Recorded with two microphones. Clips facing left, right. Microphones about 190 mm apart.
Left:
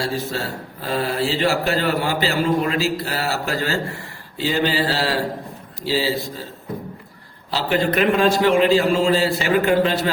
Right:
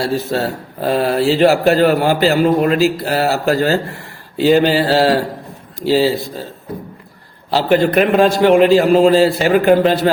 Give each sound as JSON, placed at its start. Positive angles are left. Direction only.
{"t": 0.3, "sound": "a man's voice", "side_deg": -65}
{"t": 7.5, "sound": "a man's voice", "side_deg": -55}